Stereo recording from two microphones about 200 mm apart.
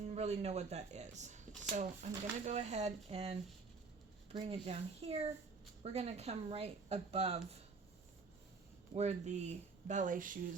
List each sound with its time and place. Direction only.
0.1 s speech: 30° right (ahead or behind)
9.0 s speech: 35° right (ahead or behind)